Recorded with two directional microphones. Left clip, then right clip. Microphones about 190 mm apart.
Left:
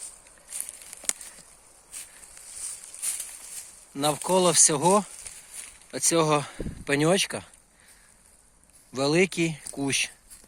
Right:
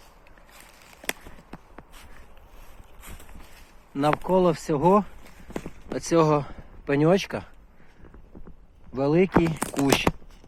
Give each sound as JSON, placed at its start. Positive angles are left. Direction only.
{"t": 3.9, "sound": "speech", "side_deg": 15}
{"t": 8.9, "sound": "speech", "side_deg": 15}